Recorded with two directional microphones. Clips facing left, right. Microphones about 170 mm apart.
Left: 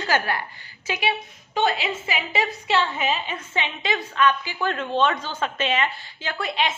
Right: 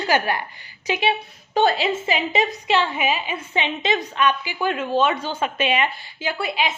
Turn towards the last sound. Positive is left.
turn(degrees=-5)  # may be behind; listen again after turning